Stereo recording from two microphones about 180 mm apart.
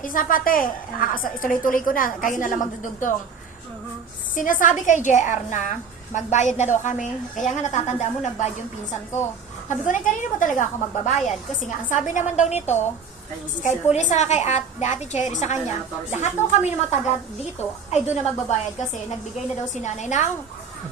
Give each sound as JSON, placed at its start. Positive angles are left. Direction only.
{"t": 0.0, "sound": "a woman's voice", "side_deg": 50}
{"t": 4.4, "sound": "a woman's voice", "side_deg": 45}
{"t": 9.6, "sound": "a woman's voice", "side_deg": 45}